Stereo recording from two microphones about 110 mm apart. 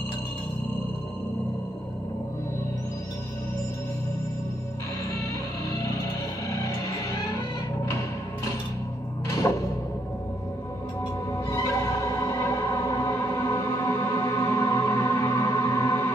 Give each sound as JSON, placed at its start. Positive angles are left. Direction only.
{"t": 9.3, "sound": "music", "side_deg": 30}
{"t": 11.5, "sound": "music", "side_deg": 25}